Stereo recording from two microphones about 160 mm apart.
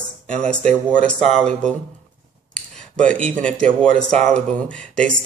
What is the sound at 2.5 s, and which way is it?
Cutlery, 5° left (ahead or behind).